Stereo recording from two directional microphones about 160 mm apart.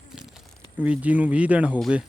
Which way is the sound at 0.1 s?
5° right (ahead or behind).